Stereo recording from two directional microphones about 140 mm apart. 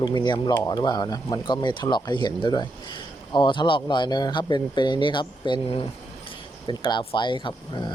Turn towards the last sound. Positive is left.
turn(degrees=35)  # may be behind; listen again after turning